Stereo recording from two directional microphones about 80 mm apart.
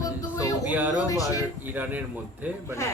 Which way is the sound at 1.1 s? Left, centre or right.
Left.